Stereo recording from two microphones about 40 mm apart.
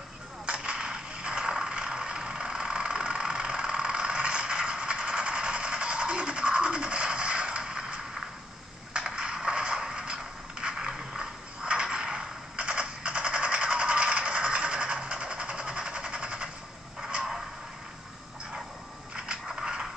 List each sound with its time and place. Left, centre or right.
0.5 s mechanisms: right
8.9 s a sound: right
19.4 s mechanisms: centre